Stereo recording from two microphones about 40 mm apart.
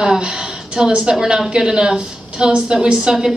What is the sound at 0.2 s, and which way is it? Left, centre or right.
A woman's voice, right.